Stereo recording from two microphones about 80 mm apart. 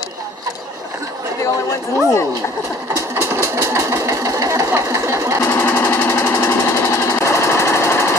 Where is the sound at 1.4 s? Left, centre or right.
Left.